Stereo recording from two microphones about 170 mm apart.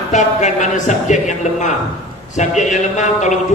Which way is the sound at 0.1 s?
45° left (ahead or behind).